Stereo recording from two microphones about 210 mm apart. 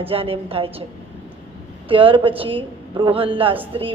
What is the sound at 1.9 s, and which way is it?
Speech, 25° right (ahead or behind).